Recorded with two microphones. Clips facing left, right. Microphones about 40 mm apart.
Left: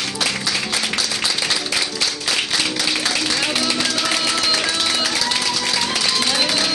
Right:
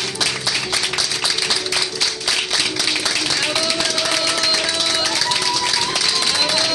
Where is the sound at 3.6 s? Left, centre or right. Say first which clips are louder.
Even; left.